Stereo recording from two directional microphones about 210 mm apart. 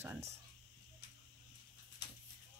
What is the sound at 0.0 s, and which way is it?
Speech, 10° right (ahead or behind).